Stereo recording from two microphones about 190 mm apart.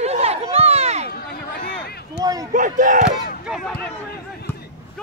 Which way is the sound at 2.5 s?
45° right (ahead or behind).